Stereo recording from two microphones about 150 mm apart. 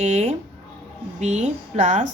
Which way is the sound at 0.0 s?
50° right (ahead or behind).